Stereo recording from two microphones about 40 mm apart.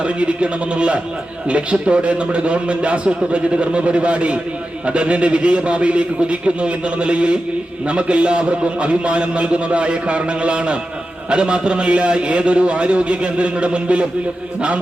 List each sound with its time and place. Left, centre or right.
0.0 s a man's voice: right